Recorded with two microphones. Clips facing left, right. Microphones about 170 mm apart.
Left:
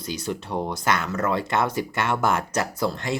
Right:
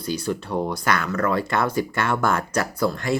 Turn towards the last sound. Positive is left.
turn(degrees=20)  # may be behind; listen again after turning